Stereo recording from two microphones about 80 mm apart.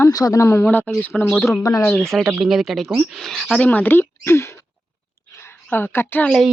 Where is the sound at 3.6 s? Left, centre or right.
Centre.